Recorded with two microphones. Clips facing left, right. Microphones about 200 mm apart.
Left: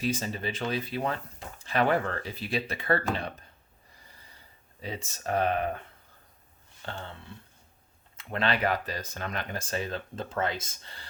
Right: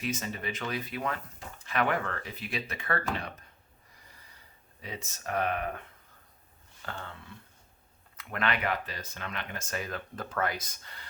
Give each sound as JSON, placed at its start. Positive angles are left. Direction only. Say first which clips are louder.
{"t": 0.0, "sound": "speech", "louder": "left 4 dB", "side_deg": 30}
{"t": 4.8, "sound": "speech", "louder": "left 4 dB", "side_deg": 30}
{"t": 6.8, "sound": "speech", "louder": "left 2 dB", "side_deg": 30}